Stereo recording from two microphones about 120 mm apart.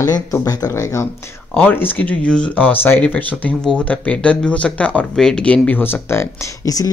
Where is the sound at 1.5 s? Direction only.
15° left (ahead or behind).